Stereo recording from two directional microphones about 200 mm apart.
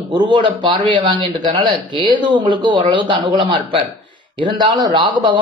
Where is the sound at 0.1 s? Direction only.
20° right (ahead or behind).